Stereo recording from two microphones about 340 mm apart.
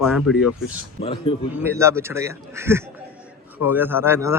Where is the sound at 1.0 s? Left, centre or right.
Centre.